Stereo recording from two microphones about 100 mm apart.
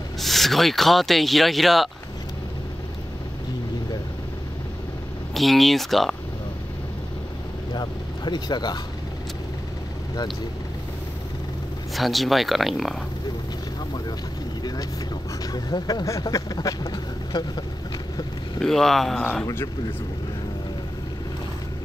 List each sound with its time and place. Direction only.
0.2 s speech: centre (ahead or behind)
5.3 s speech: centre (ahead or behind)
7.7 s speech: 45° left (ahead or behind)
11.9 s speech: centre (ahead or behind)
15.5 s speech: 40° left (ahead or behind)
18.6 s speech: 5° left (ahead or behind)